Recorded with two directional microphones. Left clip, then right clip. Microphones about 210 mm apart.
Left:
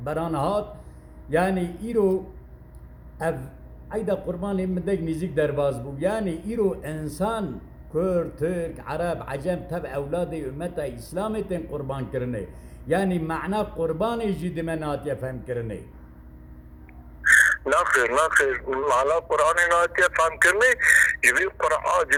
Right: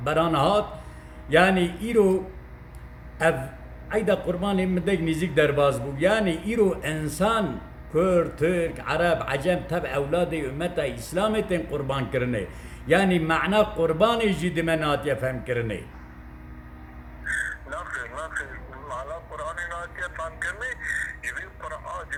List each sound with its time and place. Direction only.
0.0 s a man's voice: 10° right (ahead or behind)
3.8 s a man's voice: 5° right (ahead or behind)
17.2 s speech: 50° left (ahead or behind)